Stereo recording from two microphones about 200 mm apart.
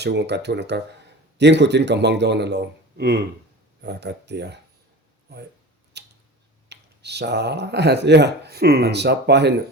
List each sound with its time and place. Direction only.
0.0 s speech: 55° right (ahead or behind)
6.0 s a sound: 55° right (ahead or behind)
6.7 s speech: 55° right (ahead or behind)